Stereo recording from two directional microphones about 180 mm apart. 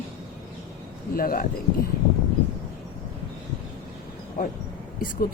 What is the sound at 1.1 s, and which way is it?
Speech, 55° left (ahead or behind).